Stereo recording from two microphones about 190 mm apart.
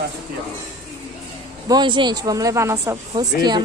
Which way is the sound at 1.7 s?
25° right (ahead or behind).